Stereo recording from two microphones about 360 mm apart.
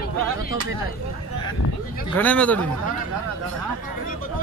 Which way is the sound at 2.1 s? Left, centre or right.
Centre.